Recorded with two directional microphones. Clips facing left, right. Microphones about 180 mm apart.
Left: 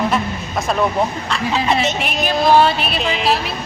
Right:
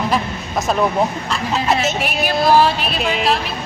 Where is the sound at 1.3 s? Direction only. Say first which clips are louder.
Even; 5° right (ahead or behind).